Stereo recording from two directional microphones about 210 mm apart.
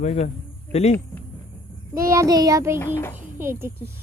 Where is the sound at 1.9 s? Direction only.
15° right (ahead or behind).